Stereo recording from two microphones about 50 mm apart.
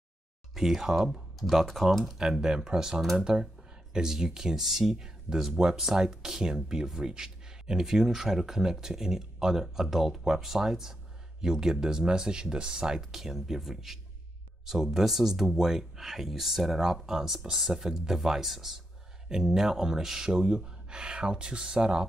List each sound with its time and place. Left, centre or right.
0.6 s speech: centre